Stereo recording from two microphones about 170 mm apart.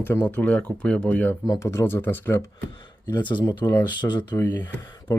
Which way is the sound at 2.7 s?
30° left (ahead or behind).